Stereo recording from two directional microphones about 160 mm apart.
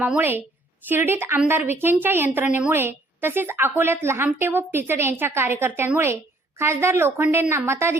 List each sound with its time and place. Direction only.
0.0 s a woman's voice: 10° right (ahead or behind)